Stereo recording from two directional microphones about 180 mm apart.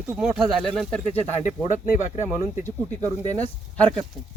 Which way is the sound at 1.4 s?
45° left (ahead or behind).